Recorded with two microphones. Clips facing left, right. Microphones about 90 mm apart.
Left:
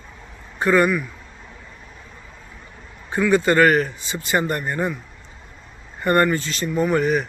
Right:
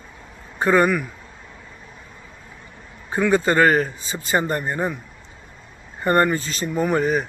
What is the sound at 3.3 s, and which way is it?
Speech, 30° right (ahead or behind).